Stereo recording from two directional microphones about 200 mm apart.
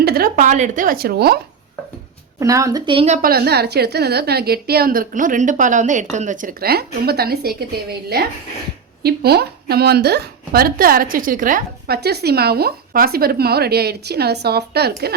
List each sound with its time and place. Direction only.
0.0 s a sound: 50° right (ahead or behind)
0.3 s a woman's voice: 35° right (ahead or behind)
2.4 s speech: 15° right (ahead or behind)
3.2 s a woman's voice: 50° right (ahead or behind)